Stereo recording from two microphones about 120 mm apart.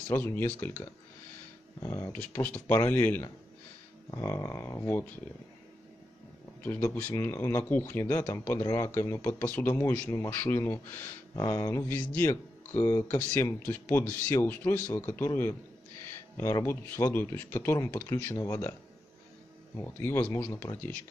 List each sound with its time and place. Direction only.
0.1 s speech: 20° left (ahead or behind)
4.1 s speech: 30° left (ahead or behind)
6.6 s speech: 15° left (ahead or behind)
11.3 s speech: 30° left (ahead or behind)
16.1 s a sound: 20° left (ahead or behind)
16.6 s speech: 20° left (ahead or behind)
19.8 s speech: 20° left (ahead or behind)